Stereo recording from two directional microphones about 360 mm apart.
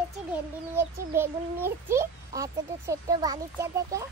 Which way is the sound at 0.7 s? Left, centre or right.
Centre.